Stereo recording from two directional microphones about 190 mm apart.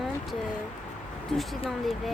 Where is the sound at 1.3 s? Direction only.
Centre (ahead or behind).